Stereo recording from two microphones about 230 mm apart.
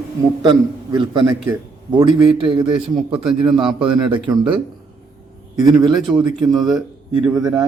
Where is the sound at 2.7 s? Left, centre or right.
Centre.